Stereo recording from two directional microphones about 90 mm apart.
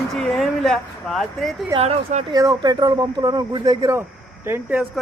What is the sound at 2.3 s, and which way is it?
Speech, 45° right (ahead or behind).